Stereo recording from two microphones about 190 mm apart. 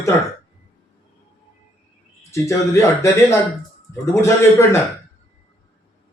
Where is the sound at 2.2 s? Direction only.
15° left (ahead or behind).